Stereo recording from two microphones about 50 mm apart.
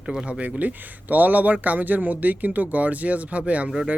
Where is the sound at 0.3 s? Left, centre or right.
Right.